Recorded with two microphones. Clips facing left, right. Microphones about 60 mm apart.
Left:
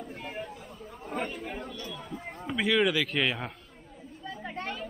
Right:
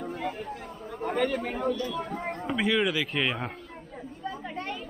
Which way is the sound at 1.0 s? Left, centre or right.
Right.